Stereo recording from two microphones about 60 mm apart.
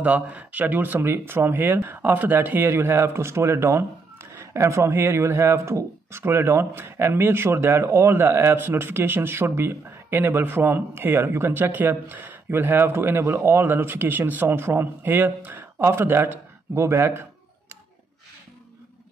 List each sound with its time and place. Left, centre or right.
0.0 s speech: right